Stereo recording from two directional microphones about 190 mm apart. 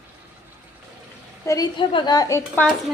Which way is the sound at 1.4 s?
20° left (ahead or behind).